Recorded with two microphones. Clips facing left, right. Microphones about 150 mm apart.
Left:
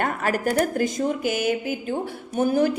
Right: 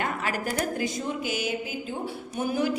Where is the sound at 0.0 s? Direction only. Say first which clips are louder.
Left 6 dB; 50° left (ahead or behind).